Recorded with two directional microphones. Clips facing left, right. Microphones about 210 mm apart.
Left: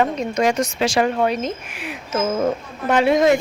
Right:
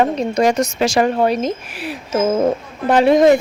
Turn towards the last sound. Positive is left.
turn(degrees=-35)  # may be behind; listen again after turning